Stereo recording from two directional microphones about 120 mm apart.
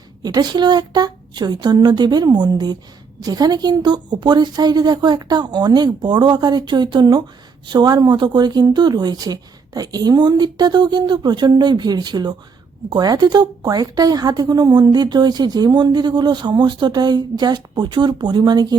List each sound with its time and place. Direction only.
0.2 s a woman's voice: 35° right (ahead or behind)